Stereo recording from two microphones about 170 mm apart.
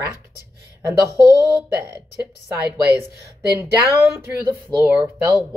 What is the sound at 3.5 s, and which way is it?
Speech, 10° right (ahead or behind).